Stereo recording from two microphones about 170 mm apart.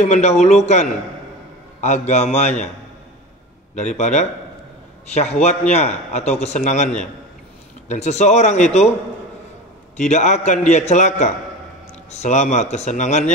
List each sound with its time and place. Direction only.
0.0 s a man's voice: 40° left (ahead or behind)
3.7 s a man's voice: 45° left (ahead or behind)
7.9 s a man's voice: 40° left (ahead or behind)
9.9 s a man's voice: 40° left (ahead or behind)